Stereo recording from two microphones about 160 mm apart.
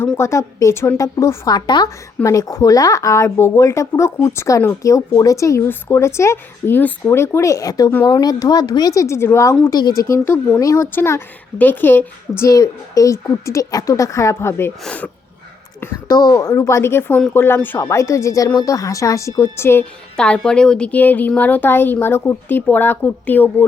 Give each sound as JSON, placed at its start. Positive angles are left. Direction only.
{"t": 0.0, "sound": "a woman's voice", "side_deg": 15}
{"t": 16.0, "sound": "speech", "side_deg": 25}